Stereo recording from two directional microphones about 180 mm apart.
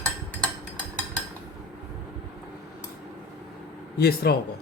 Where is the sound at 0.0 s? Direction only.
10° left (ahead or behind).